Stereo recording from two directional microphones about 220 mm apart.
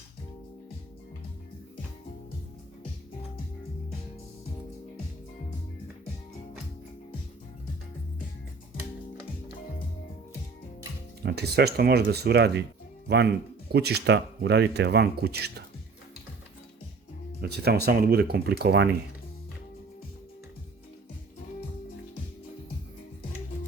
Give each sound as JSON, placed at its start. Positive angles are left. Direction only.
{"t": 11.2, "sound": "speech", "side_deg": -45}
{"t": 17.4, "sound": "speech", "side_deg": -45}